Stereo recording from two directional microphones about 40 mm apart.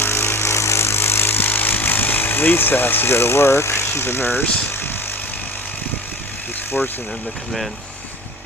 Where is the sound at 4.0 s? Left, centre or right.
Left.